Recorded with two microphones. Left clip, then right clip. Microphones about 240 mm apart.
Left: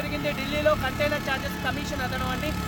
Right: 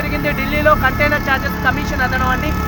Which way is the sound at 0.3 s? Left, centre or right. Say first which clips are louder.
Right 10 dB; left.